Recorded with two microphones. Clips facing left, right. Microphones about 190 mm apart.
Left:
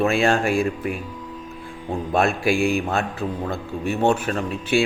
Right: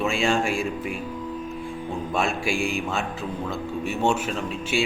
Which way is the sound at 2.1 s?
60° left (ahead or behind).